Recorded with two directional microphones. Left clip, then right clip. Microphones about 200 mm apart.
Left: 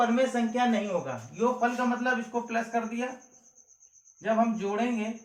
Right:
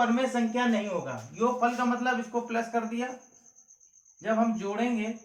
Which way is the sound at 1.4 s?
15° right (ahead or behind).